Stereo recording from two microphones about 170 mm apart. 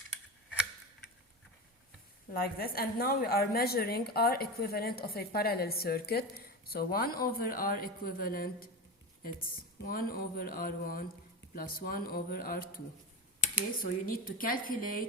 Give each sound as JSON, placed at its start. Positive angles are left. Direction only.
{"t": 2.3, "sound": "a woman's voice", "side_deg": 60}
{"t": 13.8, "sound": "a woman's voice", "side_deg": 55}